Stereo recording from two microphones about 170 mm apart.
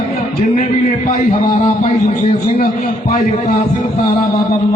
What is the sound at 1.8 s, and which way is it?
Speech, 40° left (ahead or behind).